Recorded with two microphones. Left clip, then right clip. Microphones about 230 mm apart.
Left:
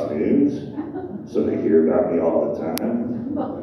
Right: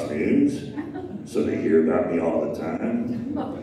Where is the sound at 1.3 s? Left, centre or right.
Right.